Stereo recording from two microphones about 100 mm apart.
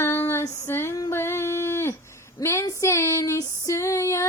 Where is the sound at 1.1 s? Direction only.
25° left (ahead or behind).